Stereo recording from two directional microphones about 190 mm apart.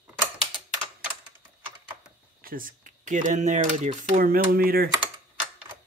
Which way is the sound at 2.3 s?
50° right (ahead or behind).